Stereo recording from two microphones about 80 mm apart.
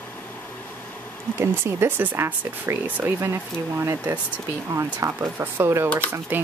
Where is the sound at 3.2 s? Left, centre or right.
Right.